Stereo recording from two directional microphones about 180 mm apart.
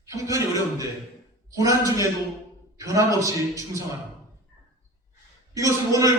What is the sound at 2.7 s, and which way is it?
A man's voice, 15° right (ahead or behind).